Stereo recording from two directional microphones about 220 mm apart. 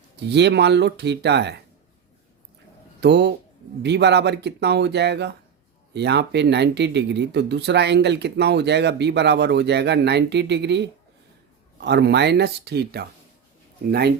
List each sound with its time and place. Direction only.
0.2 s speech: 50° right (ahead or behind)
3.0 s speech: 50° right (ahead or behind)